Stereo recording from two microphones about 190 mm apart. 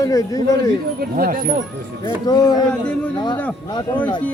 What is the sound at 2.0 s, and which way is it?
Speech, 20° left (ahead or behind).